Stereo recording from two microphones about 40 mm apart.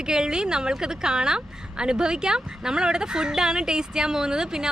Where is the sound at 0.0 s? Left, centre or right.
Centre.